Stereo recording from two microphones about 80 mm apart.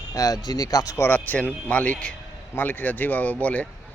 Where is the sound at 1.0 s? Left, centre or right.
Left.